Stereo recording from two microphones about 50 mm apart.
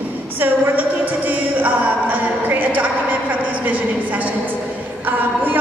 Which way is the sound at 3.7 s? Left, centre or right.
Right.